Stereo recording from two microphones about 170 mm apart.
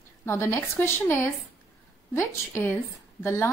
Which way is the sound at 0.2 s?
15° left (ahead or behind).